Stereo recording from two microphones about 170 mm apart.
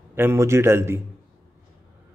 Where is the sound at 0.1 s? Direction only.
15° right (ahead or behind).